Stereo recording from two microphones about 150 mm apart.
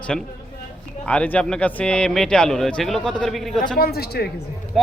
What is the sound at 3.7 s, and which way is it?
Speech, 90° left.